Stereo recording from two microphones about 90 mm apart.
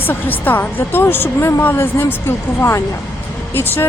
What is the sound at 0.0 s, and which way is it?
A woman's voice, 20° left (ahead or behind).